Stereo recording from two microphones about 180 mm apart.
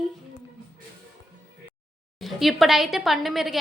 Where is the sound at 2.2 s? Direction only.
Centre (ahead or behind).